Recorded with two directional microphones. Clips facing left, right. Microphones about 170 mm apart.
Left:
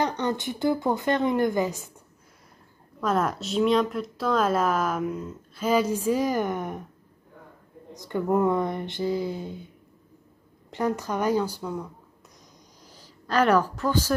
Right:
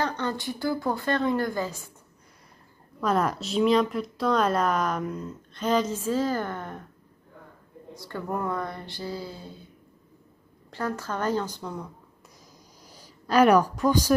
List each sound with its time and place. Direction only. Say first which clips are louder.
0.0 s a woman's voice: left 2 dB; 20° left (ahead or behind)
3.0 s speech: even; centre (ahead or behind); by 6.9 s 15° left (ahead or behind)
7.9 s a woman's voice: left 7 dB; 20° left (ahead or behind)
10.7 s speech: left 4 dB; 20° left (ahead or behind)
12.8 s speech: right 3 dB; 10° right (ahead or behind)